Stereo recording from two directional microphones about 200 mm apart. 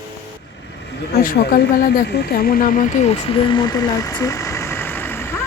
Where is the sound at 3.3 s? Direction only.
25° left (ahead or behind).